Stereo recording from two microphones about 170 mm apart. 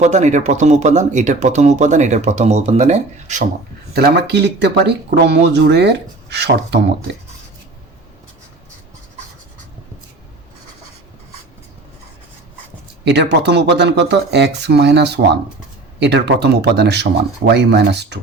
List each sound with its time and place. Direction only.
0.0 s speech: 45° right (ahead or behind)
3.9 s speech: 70° right (ahead or behind)
13.1 s speech: 85° right